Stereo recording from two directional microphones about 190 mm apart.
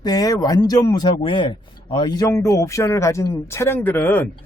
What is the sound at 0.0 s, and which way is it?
A man's voice, 20° left (ahead or behind).